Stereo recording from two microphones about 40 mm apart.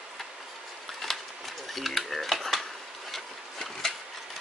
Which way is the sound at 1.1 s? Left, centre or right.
Centre.